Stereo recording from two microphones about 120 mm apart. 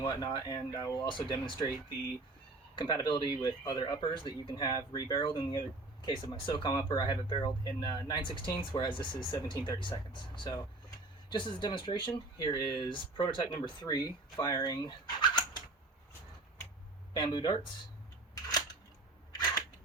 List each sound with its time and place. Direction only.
0.0 s speech: 35° left (ahead or behind)
2.7 s speech: 40° left (ahead or behind)
14.6 s a sound: 35° left (ahead or behind)
17.2 s speech: 40° left (ahead or behind)